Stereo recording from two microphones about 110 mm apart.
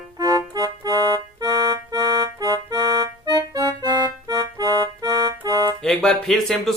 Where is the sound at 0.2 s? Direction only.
25° right (ahead or behind).